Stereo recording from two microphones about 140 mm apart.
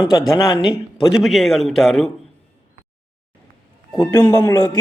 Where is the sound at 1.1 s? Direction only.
Centre (ahead or behind).